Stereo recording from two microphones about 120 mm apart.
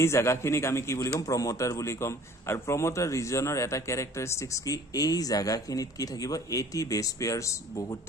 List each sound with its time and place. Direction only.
0.0 s a man's voice: 25° left (ahead or behind)